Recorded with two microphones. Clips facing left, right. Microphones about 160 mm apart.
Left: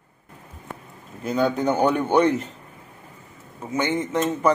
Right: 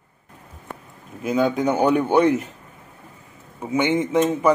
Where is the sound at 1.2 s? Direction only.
5° right (ahead or behind).